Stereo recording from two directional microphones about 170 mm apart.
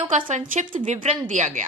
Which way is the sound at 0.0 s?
40° right (ahead or behind).